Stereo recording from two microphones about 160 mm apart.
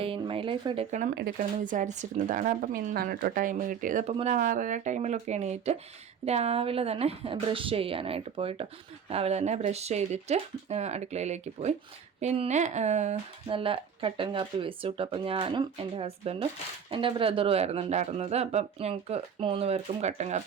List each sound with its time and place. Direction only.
0.0 s speech: 35° right (ahead or behind)
0.9 s speech: 50° right (ahead or behind)
4.4 s speech: 55° right (ahead or behind)
13.5 s speech: 35° right (ahead or behind)